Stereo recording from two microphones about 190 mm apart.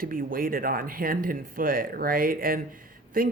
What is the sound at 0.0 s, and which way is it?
Speech, 50° right (ahead or behind).